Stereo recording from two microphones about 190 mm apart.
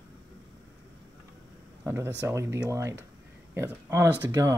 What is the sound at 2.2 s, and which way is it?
Speech, 15° right (ahead or behind).